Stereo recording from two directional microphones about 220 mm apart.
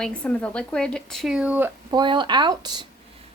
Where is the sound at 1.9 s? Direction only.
20° right (ahead or behind).